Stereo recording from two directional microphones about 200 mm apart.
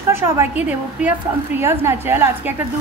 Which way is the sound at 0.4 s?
10° right (ahead or behind).